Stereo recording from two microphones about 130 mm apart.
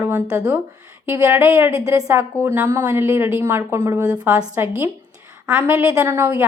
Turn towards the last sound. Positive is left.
turn(degrees=-15)  # may be behind; listen again after turning